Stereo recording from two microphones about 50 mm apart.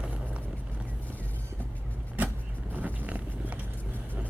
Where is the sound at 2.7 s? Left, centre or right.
Right.